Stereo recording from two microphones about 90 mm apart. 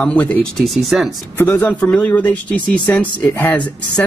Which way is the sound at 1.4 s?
20° left (ahead or behind).